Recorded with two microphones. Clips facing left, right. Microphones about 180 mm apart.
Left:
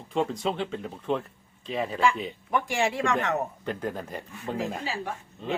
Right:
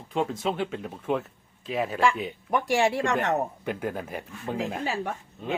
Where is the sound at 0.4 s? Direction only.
Centre (ahead or behind).